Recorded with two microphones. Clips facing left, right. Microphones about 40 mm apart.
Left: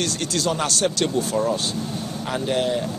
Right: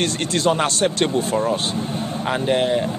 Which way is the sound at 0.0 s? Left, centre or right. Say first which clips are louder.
Right 4 dB; right.